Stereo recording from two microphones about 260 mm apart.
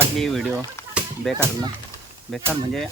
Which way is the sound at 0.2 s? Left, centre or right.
Centre.